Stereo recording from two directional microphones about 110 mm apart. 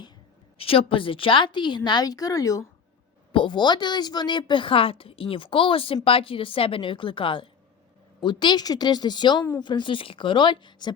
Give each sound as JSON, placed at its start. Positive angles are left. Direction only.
{"t": 0.6, "sound": "speech", "side_deg": 55}
{"t": 3.3, "sound": "speech", "side_deg": 45}